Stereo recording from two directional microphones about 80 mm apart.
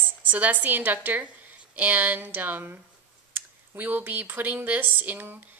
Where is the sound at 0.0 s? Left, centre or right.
Right.